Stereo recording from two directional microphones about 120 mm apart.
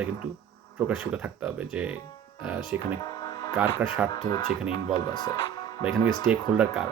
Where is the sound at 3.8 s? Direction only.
15° right (ahead or behind).